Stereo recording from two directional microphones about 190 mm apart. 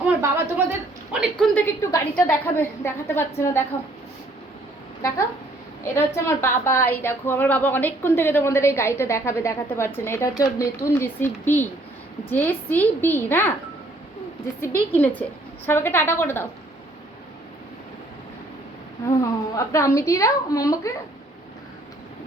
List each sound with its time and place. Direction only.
0.2 s a woman's voice: 10° right (ahead or behind)
1.5 s a woman's voice: 10° left (ahead or behind)
6.1 s a woman's voice: 15° left (ahead or behind)
14.6 s a woman's voice: 10° left (ahead or behind)
19.0 s a woman's voice: 15° left (ahead or behind)